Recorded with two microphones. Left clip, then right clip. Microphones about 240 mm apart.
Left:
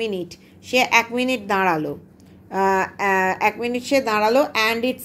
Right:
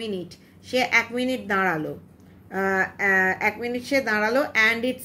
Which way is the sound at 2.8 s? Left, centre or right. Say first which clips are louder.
Left 1 dB; left.